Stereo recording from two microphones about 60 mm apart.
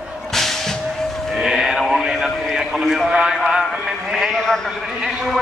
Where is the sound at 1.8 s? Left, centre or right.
Centre.